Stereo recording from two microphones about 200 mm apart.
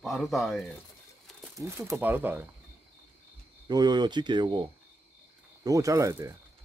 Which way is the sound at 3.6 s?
20° right (ahead or behind).